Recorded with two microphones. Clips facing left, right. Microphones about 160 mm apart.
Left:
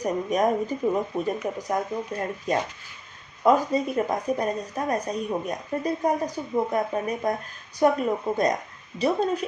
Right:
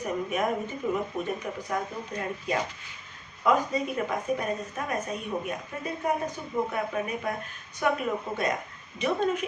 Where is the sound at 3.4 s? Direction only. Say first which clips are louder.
Left 4 dB; 35° left (ahead or behind).